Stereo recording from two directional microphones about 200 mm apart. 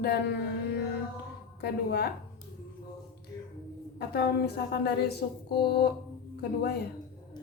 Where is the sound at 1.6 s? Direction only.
55° left (ahead or behind).